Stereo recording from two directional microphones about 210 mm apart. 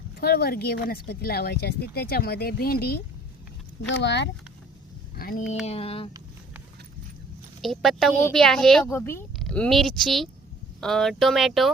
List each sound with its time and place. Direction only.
0.2 s speech: 50° left (ahead or behind)
3.8 s speech: 55° left (ahead or behind)
5.1 s speech: 45° left (ahead or behind)
5.6 s speech: 30° left (ahead or behind)
7.6 s speech: centre (ahead or behind)